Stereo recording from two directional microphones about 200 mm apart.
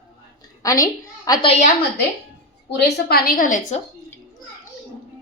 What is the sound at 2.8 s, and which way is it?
A woman's voice, 50° left (ahead or behind).